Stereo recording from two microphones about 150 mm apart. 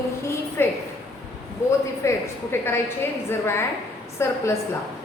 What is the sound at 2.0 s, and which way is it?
A woman's voice, 15° left (ahead or behind).